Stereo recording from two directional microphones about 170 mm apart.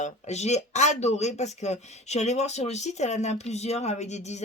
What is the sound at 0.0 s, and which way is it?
Speech, 40° left (ahead or behind).